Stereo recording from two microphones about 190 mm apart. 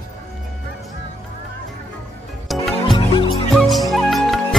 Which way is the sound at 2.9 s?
25° left (ahead or behind).